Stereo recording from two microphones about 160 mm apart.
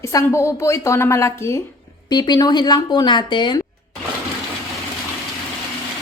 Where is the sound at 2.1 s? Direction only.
25° left (ahead or behind).